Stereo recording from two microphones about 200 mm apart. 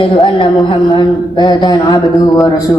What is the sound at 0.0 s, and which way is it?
A woman's voice, 25° left (ahead or behind).